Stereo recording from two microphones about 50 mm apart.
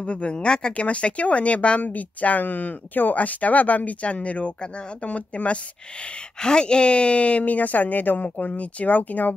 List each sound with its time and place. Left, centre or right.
0.0 s speech: left